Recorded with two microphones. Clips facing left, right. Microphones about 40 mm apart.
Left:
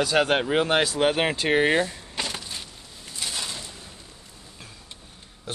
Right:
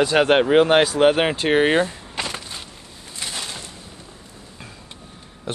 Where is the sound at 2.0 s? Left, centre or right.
Right.